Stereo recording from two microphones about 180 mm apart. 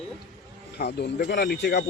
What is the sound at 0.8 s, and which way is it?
Speech, 65° left (ahead or behind).